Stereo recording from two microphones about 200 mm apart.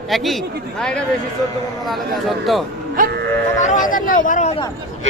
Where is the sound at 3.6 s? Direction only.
40° left (ahead or behind).